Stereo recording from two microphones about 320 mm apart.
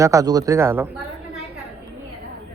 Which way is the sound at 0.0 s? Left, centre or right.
Centre.